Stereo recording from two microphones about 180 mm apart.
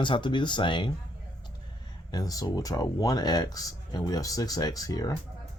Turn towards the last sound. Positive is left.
turn(degrees=20)  # may be behind; listen again after turning